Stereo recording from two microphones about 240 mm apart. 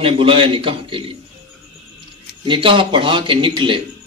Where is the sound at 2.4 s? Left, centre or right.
Right.